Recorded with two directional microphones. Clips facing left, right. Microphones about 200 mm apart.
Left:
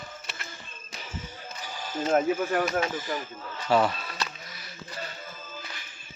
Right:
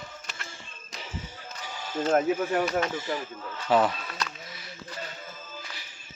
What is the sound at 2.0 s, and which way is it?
Speech, 5° left (ahead or behind).